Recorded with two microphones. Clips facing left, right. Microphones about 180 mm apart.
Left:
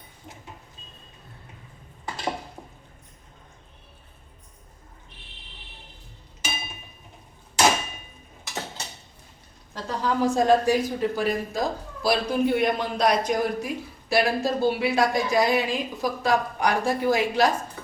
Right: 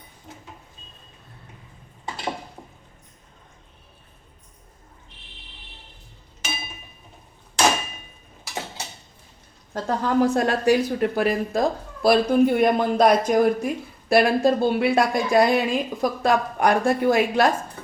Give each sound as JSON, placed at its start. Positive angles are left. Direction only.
{"t": 9.7, "sound": "speech", "side_deg": -55}
{"t": 12.0, "sound": "speech", "side_deg": -50}